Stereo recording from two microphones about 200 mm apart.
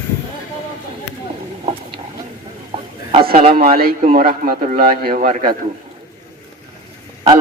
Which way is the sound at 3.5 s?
45° right (ahead or behind).